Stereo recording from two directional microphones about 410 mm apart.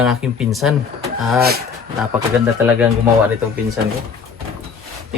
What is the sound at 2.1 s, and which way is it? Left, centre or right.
Speech, centre.